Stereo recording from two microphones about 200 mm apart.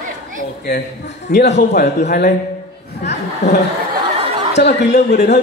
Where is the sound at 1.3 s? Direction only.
55° left (ahead or behind).